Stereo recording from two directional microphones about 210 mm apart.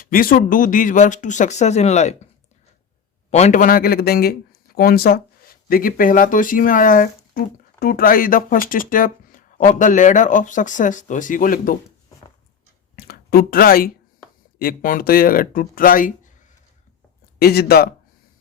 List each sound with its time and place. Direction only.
0.0 s a man's voice: 40° left (ahead or behind)
3.2 s a man's voice: 30° left (ahead or behind)
13.1 s speech: 45° left (ahead or behind)
17.4 s speech: 50° left (ahead or behind)